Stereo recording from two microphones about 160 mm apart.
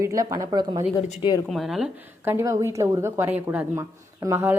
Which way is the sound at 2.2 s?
15° right (ahead or behind).